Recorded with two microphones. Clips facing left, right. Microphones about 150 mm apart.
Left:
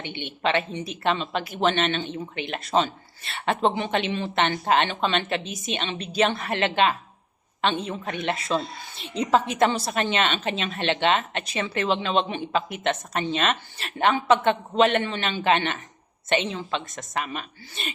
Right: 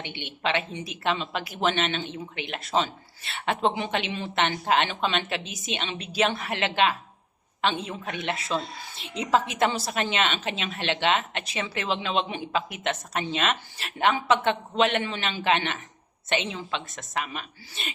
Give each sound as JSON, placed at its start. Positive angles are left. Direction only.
{"t": 0.0, "sound": "a woman's voice", "side_deg": 50}
{"t": 0.3, "sound": "a woman's voice", "side_deg": -5}